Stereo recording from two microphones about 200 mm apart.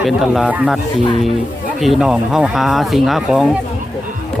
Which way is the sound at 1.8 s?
Centre (ahead or behind).